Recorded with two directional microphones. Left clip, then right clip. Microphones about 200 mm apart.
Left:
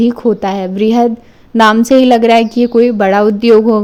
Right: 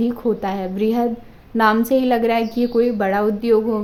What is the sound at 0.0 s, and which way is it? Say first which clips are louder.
A woman's voice: left 8 dB; 35° left (ahead or behind).